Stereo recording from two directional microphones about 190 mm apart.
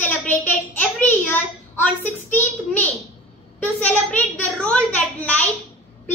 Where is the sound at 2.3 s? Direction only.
10° left (ahead or behind).